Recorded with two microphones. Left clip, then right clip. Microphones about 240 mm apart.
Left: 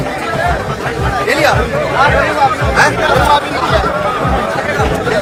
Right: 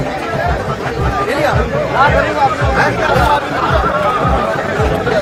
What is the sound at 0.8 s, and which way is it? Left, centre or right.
Music, centre.